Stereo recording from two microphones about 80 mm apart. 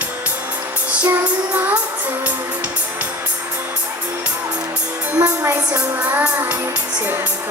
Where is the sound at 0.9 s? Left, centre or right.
Centre.